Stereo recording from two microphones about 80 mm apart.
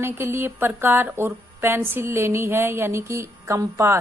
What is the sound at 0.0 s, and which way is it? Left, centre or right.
Speech, right.